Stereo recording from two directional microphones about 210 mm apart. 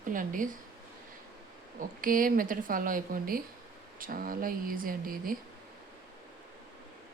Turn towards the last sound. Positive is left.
turn(degrees=-40)  # may be behind; listen again after turning